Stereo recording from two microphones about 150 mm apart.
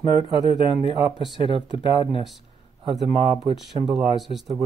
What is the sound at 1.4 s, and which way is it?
Speech, 35° left (ahead or behind).